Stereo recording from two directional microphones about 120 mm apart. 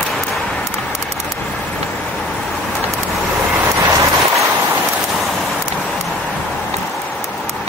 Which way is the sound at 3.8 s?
25° right (ahead or behind).